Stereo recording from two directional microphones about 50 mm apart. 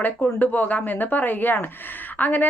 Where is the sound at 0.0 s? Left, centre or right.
Left.